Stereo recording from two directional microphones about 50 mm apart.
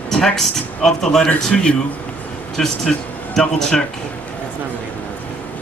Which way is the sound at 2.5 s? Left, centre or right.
Centre.